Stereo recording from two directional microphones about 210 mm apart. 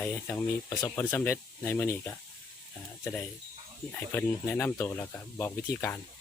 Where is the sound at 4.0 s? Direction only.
10° left (ahead or behind).